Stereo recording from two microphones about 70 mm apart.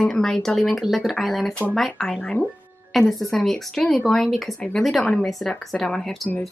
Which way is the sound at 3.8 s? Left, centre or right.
Centre.